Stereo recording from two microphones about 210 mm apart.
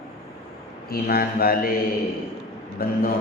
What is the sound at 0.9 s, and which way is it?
Speech, 45° left (ahead or behind).